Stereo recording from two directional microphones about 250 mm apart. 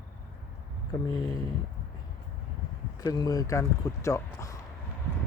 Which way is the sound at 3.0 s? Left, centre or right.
Centre.